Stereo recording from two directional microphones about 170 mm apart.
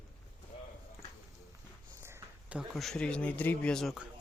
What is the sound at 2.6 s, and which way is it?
Speech, centre (ahead or behind).